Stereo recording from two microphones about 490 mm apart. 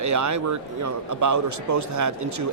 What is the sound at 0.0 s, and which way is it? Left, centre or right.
A man's voice, right.